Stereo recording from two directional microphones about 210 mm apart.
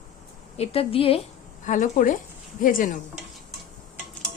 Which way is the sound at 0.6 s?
30° left (ahead or behind).